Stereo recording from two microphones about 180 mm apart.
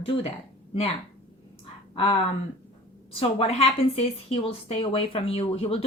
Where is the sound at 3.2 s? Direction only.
35° left (ahead or behind).